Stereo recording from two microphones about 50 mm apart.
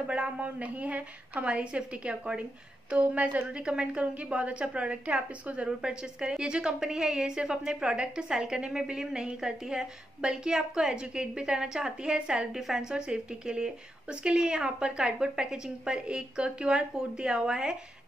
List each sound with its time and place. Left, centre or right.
0.0 s a woman's voice: right